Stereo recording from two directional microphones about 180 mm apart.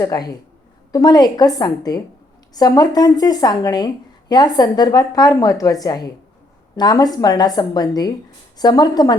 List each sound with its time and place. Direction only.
0.0 s speech: 20° left (ahead or behind)